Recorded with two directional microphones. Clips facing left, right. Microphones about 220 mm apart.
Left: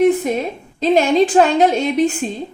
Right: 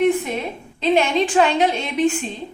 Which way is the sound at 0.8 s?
40° left (ahead or behind).